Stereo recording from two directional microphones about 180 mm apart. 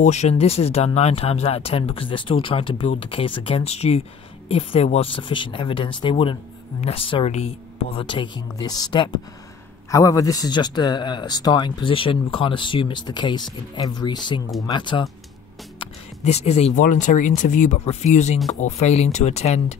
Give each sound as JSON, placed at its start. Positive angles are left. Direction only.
{"t": 0.0, "sound": "speech", "side_deg": 40}
{"t": 15.8, "sound": "speech", "side_deg": 35}